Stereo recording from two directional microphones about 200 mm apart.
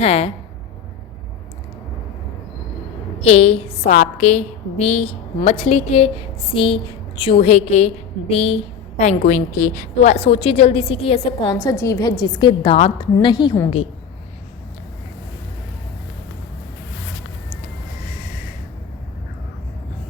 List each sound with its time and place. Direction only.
0.0 s speech: 30° left (ahead or behind)
3.2 s a woman's voice: 30° left (ahead or behind)